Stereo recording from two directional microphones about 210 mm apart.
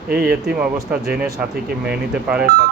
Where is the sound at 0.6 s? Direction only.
5° right (ahead or behind).